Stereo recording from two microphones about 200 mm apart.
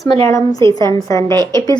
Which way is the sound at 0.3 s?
15° left (ahead or behind).